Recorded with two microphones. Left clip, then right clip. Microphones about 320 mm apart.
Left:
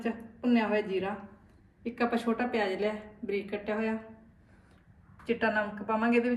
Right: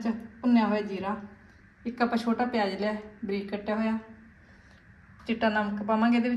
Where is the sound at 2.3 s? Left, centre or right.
Centre.